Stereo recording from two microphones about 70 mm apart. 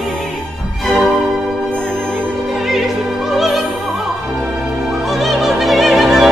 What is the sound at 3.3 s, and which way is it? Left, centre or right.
Opera, centre.